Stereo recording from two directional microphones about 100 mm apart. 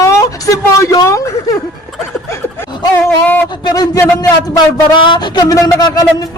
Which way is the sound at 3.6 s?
45° left (ahead or behind).